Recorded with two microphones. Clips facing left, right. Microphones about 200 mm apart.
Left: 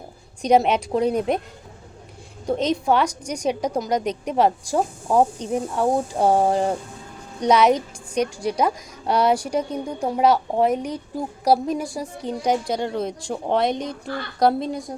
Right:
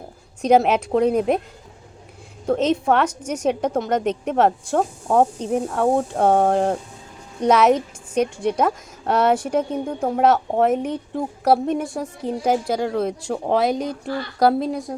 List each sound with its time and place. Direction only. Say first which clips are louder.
0.4 s a woman's voice: right 2 dB; 5° right (ahead or behind)
2.5 s a woman's voice: right 2 dB; 5° right (ahead or behind)